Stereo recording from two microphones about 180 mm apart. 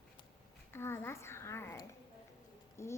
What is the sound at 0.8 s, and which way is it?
Speech, 15° left (ahead or behind).